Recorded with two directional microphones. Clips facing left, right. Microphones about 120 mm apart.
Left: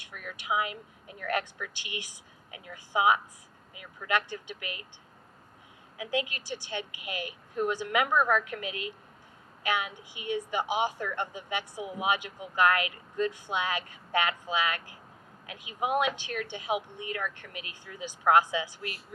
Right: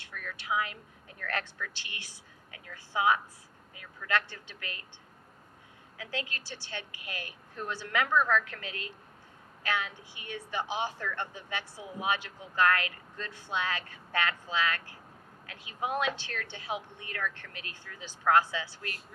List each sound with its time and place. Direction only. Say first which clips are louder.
0.0 s a woman's voice: even; 15° left (ahead or behind)
6.0 s a woman's voice: left 6 dB; 15° left (ahead or behind)